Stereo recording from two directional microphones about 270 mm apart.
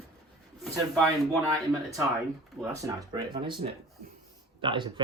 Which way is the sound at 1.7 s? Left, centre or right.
Centre.